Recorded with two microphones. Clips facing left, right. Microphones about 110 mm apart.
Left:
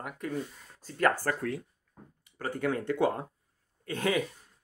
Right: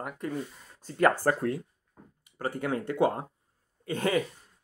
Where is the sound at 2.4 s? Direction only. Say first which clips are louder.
Even; 10° right (ahead or behind).